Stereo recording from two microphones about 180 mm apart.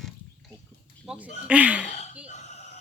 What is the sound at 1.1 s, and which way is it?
Speech, 10° right (ahead or behind).